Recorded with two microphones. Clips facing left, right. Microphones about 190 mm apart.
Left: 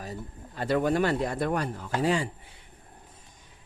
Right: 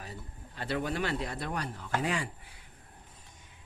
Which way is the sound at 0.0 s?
40° left (ahead or behind).